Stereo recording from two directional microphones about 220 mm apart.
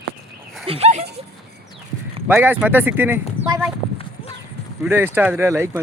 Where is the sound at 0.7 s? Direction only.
30° right (ahead or behind).